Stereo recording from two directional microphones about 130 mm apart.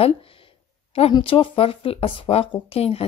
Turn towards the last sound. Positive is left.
turn(degrees=50)  # may be behind; listen again after turning